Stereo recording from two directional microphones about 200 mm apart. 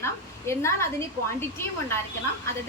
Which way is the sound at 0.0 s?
15° left (ahead or behind).